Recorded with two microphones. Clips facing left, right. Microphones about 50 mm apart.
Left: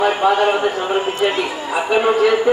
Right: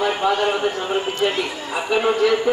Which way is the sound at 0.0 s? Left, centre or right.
Centre.